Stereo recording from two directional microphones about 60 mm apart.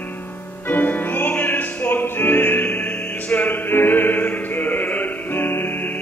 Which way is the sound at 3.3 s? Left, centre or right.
Left.